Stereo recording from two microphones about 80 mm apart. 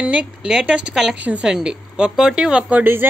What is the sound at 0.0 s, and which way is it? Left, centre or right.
Speech, centre.